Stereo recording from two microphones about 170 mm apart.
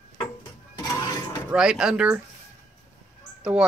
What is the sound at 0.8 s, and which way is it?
Dishes, 20° left (ahead or behind).